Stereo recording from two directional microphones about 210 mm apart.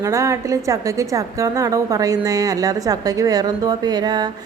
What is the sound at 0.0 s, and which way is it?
A woman's voice, 15° right (ahead or behind).